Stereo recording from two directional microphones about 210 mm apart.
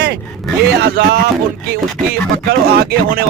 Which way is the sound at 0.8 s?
50° right (ahead or behind).